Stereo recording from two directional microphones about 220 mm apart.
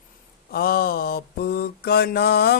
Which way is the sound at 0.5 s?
45° left (ahead or behind).